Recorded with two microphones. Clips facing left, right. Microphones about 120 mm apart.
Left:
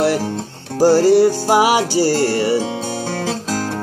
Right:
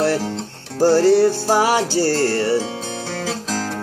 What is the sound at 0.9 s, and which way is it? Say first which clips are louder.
Music: left 1 dB; 10° left (ahead or behind).